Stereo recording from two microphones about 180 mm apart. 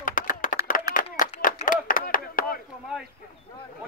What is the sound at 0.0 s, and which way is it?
Clapping, 50° left (ahead or behind).